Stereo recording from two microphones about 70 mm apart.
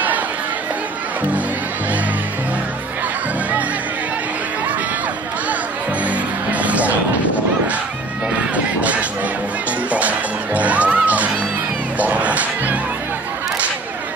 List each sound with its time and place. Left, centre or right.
6.0 s music: right
9.8 s music: right
12.0 s crowd: right